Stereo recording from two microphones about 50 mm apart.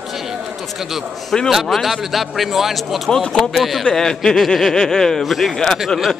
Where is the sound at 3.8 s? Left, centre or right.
Centre.